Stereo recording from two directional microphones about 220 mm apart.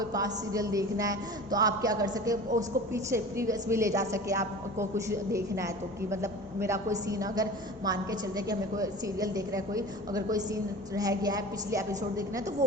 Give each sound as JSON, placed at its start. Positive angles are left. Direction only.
{"t": 0.0, "sound": "a woman's voice", "side_deg": -15}